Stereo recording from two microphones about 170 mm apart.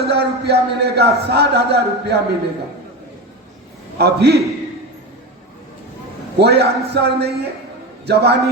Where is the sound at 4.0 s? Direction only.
75° right (ahead or behind).